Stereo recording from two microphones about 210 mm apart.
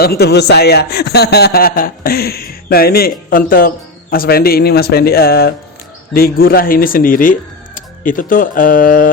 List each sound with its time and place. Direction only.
0.0 s a man's voice: 50° left (ahead or behind)